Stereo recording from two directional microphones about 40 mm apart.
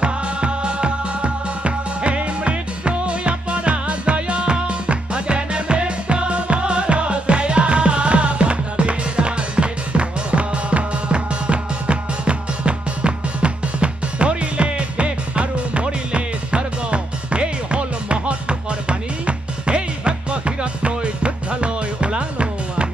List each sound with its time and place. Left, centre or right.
0.0 s music: right